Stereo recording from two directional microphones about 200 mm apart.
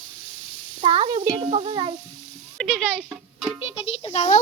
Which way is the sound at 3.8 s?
25° left (ahead or behind).